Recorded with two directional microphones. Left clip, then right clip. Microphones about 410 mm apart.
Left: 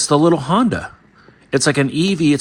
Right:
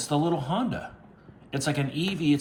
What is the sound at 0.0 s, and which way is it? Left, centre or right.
Speech, centre.